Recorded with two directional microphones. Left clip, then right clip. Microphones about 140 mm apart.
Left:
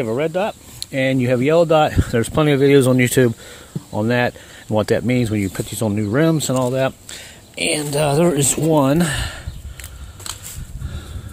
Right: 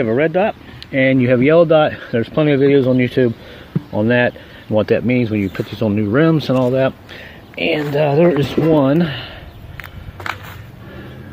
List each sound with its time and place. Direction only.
0.0 s speech: 25° left (ahead or behind); by 2.8 s 50° left (ahead or behind)
2.8 s speech: 60° left (ahead or behind)
3.9 s speech: 35° left (ahead or behind); by 9.4 s 55° left (ahead or behind)